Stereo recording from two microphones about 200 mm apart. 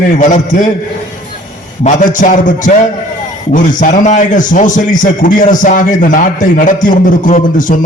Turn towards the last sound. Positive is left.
turn(degrees=40)  # may be behind; listen again after turning